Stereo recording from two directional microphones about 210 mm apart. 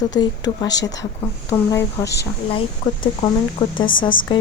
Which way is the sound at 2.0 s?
55° left (ahead or behind).